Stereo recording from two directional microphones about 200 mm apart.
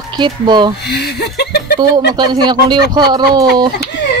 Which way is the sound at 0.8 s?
55° left (ahead or behind).